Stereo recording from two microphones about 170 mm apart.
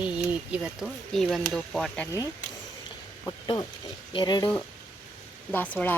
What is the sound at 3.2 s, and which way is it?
Speech, 20° left (ahead or behind).